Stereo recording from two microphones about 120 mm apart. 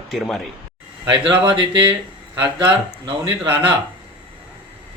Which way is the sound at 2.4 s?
45° right (ahead or behind).